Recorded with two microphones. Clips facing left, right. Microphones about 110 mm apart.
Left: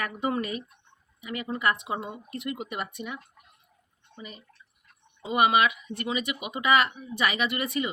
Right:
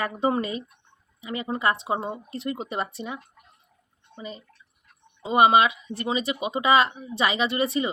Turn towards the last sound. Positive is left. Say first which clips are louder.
# right 4 dB
turn(degrees=-25)  # may be behind; listen again after turning